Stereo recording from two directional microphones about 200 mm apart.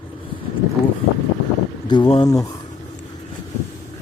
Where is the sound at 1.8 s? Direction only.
25° left (ahead or behind).